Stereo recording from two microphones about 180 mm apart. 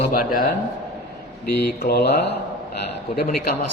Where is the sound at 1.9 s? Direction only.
65° left (ahead or behind).